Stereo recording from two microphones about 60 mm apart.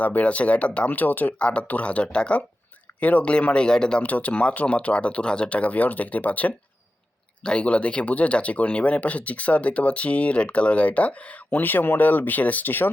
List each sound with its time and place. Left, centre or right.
0.0 s speech: left
4.0 s speech: left